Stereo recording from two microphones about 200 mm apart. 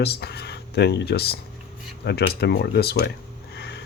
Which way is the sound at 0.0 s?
55° left (ahead or behind).